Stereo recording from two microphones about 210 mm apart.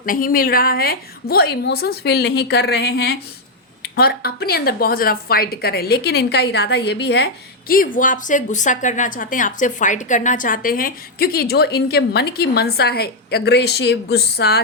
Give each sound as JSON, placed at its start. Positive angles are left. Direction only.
{"t": 0.0, "sound": "a woman's voice", "side_deg": 40}
{"t": 7.7, "sound": "a woman's voice", "side_deg": 40}